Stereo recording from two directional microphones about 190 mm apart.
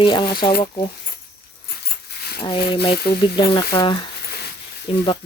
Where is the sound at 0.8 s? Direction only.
55° left (ahead or behind).